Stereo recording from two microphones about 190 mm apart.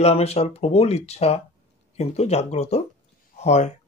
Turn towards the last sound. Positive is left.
turn(degrees=35)  # may be behind; listen again after turning